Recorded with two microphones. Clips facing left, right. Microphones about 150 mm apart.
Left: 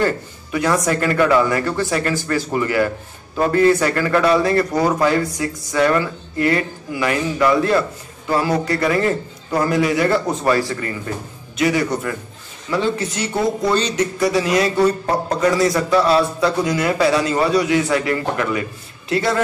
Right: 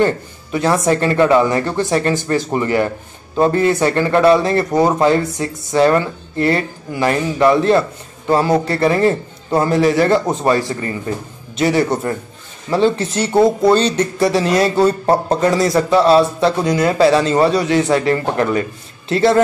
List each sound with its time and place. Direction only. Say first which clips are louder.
0.0 s speech: right 4 dB; 25° right (ahead or behind)